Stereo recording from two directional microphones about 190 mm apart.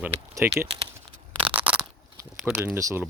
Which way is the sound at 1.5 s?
5° right (ahead or behind).